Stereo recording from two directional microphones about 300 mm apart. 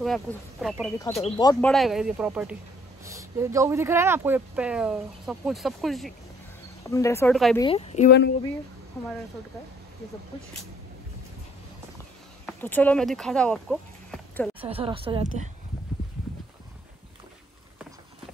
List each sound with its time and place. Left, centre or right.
0.0 s speech: centre
7.6 s speech: centre
12.4 s speech: centre
14.6 s speech: centre